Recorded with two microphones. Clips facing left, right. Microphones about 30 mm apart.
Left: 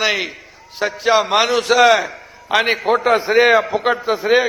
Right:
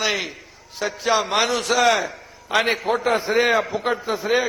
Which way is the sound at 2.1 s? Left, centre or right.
Centre.